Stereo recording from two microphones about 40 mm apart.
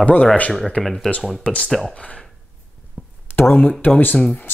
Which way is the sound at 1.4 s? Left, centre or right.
Left.